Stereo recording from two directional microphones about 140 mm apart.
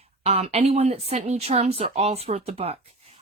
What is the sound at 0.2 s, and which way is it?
Speech, 50° right (ahead or behind).